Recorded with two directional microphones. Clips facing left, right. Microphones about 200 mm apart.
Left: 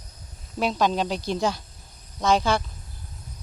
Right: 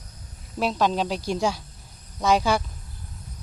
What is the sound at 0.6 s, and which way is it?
Speech, centre (ahead or behind).